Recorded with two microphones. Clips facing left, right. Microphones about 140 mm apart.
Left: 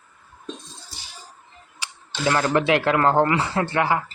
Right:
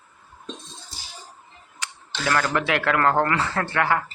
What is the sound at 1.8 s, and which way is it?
Camera, 15° left (ahead or behind).